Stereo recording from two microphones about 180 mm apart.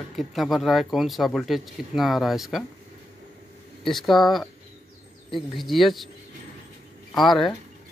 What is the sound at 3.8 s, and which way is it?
Speech, centre (ahead or behind).